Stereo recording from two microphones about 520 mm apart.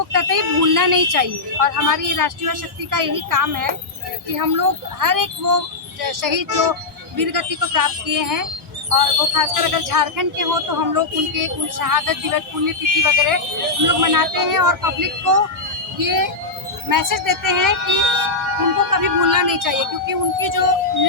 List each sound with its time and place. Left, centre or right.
0.1 s speech: right
18.9 s speech: right